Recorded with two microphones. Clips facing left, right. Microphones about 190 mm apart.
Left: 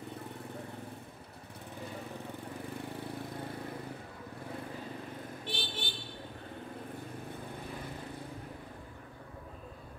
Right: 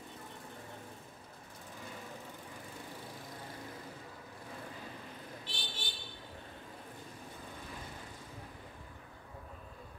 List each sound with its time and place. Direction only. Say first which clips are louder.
5.4 s vehicle: left 6 dB; 60° left (ahead or behind)